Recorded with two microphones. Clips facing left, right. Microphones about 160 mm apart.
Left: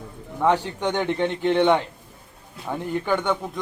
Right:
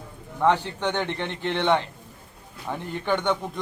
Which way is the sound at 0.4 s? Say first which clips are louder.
Left 1 dB; 10° left (ahead or behind).